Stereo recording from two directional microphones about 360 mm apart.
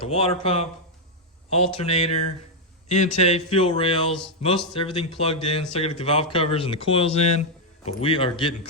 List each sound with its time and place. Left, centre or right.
0.0 s speech: centre
3.2 s speech: centre